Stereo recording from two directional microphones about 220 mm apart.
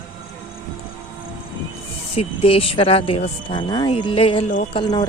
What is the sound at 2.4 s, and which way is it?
Speech, 25° left (ahead or behind).